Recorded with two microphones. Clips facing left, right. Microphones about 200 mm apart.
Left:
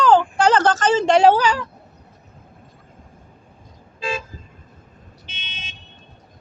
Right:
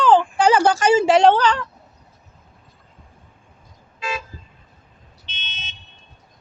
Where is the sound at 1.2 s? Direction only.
5° left (ahead or behind).